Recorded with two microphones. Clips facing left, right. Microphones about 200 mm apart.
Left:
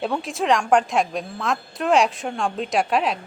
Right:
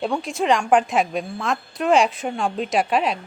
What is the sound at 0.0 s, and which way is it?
A woman's voice, centre (ahead or behind).